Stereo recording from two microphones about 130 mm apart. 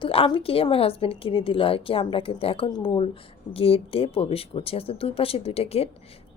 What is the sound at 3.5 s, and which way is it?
A woman's voice, 50° left (ahead or behind).